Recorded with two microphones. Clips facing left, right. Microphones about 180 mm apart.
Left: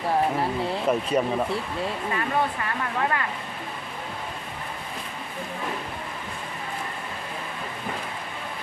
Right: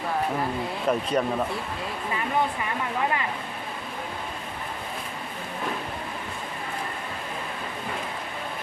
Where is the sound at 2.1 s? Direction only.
15° right (ahead or behind).